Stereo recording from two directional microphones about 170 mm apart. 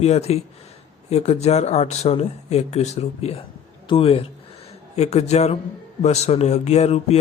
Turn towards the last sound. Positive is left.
turn(degrees=40)  # may be behind; listen again after turning